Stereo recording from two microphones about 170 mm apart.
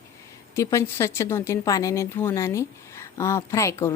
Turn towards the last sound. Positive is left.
turn(degrees=15)  # may be behind; listen again after turning